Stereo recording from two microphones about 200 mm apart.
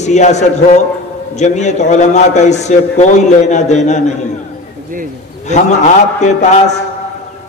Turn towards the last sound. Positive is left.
turn(degrees=35)  # may be behind; listen again after turning